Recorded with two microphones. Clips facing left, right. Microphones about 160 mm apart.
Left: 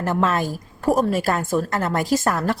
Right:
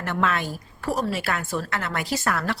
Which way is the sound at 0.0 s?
40° left (ahead or behind).